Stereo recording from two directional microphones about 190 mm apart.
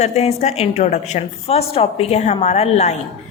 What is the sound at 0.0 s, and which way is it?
A woman's voice, 35° left (ahead or behind).